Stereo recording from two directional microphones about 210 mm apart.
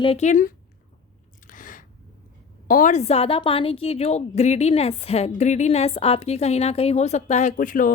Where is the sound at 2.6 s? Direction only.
40° left (ahead or behind).